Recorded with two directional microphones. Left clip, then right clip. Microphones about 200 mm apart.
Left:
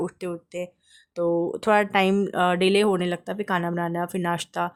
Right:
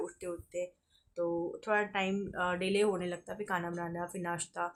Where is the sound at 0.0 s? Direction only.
50° left (ahead or behind).